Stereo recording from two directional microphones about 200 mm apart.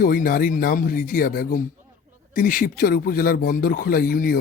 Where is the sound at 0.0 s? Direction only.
45° left (ahead or behind).